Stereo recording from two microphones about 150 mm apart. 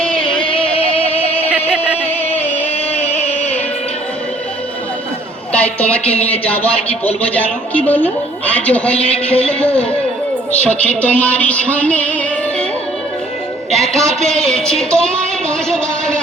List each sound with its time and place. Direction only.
0.0 s music: 5° left (ahead or behind)
0.4 s music: 40° left (ahead or behind)
2.3 s music: 10° left (ahead or behind)
3.2 s music: 45° left (ahead or behind)
5.5 s a woman's voice: 10° left (ahead or behind)
7.9 s a woman's voice: 10° left (ahead or behind)
13.7 s a woman's voice: 5° left (ahead or behind)